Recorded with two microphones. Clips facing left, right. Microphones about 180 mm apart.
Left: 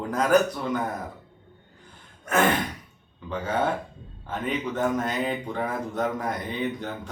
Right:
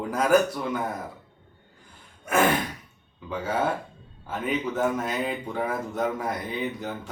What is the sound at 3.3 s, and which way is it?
Speech, 10° right (ahead or behind).